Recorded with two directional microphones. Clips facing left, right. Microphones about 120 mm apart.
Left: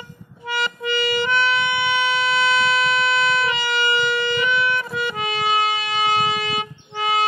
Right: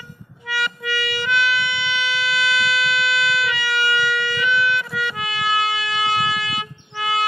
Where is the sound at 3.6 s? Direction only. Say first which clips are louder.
Even; 25° left (ahead or behind).